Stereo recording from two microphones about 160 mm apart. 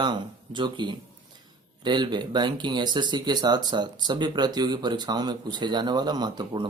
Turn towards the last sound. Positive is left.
turn(degrees=-25)  # may be behind; listen again after turning